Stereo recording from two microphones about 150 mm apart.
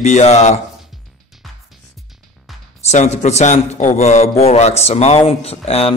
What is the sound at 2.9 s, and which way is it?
A man's voice, 50° left (ahead or behind).